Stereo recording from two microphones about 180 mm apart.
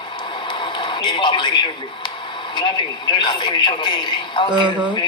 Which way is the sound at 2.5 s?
25° left (ahead or behind).